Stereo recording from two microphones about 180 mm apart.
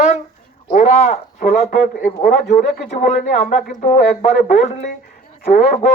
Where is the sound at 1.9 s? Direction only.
60° left (ahead or behind).